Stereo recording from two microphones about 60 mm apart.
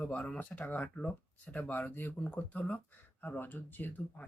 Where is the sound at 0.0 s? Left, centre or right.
Left.